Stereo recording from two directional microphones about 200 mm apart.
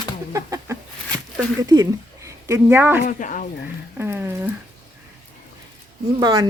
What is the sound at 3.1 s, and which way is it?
Speech, 40° left (ahead or behind).